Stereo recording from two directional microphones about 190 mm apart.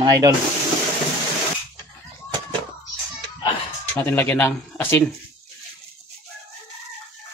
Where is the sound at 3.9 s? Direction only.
10° left (ahead or behind).